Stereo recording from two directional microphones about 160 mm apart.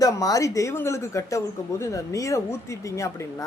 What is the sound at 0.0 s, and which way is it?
Speech, 20° left (ahead or behind).